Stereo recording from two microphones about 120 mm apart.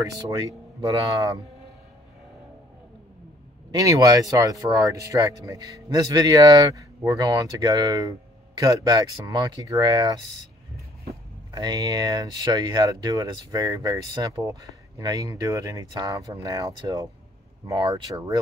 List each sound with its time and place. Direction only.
0.8 s speech: 30° right (ahead or behind)
3.7 s speech: 30° right (ahead or behind)
11.5 s speech: 35° right (ahead or behind)